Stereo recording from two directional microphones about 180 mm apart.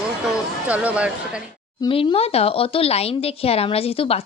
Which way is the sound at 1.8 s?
30° left (ahead or behind).